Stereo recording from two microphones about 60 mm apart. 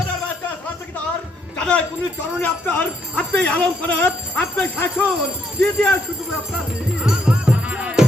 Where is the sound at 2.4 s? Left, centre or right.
Left.